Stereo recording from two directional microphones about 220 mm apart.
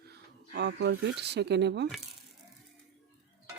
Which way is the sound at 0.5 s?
50° right (ahead or behind).